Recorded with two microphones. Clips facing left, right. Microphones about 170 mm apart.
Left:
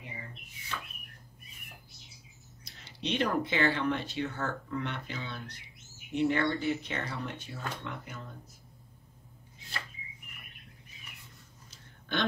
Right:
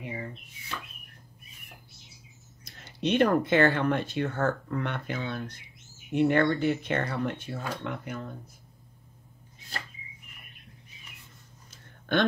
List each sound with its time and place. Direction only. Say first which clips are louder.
2.6 s speech: right 8 dB; 50° right (ahead or behind)
12.1 s speech: right 7 dB; 55° right (ahead or behind)